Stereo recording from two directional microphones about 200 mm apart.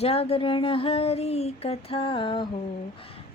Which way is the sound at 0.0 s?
30° left (ahead or behind).